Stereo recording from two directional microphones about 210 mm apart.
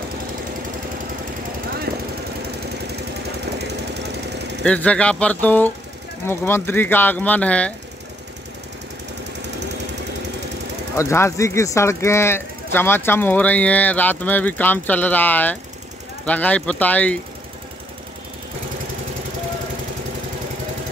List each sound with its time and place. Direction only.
1.9 s jackhammer: 45° right (ahead or behind)
4.6 s speech: 5° left (ahead or behind)
11.0 s speech: 15° left (ahead or behind)